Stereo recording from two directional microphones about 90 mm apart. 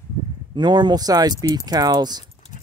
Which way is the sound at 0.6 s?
55° right (ahead or behind).